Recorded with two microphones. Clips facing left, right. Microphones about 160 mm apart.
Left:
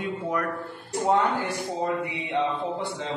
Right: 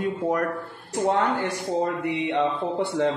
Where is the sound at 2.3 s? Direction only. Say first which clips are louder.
Left 1 dB; 60° right (ahead or behind).